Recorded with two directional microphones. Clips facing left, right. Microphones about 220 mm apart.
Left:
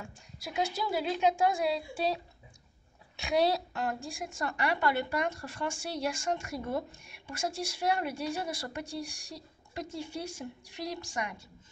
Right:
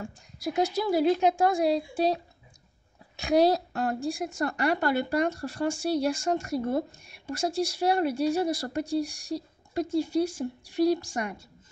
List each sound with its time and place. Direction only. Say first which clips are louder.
0.0 s a woman's voice: right 11 dB; 40° right (ahead or behind)
3.2 s a woman's voice: right 6 dB; 40° right (ahead or behind)